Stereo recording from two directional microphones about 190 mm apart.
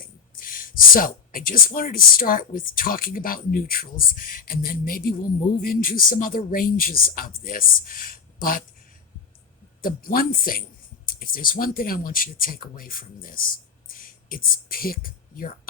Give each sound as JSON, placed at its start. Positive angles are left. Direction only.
{"t": 0.0, "sound": "speech", "side_deg": 50}
{"t": 9.8, "sound": "speech", "side_deg": 50}